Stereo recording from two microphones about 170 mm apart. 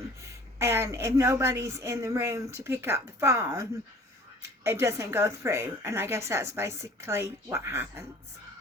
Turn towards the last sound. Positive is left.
turn(degrees=-15)  # may be behind; listen again after turning